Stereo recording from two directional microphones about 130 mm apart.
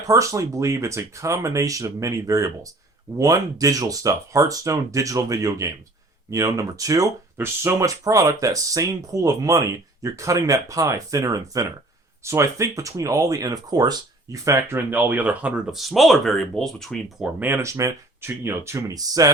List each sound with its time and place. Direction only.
0.1 s speech: 25° right (ahead or behind); by 17.2 s 5° left (ahead or behind)
17.4 s speech: 20° right (ahead or behind)